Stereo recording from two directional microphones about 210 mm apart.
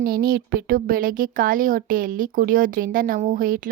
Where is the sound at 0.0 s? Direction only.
45° right (ahead or behind).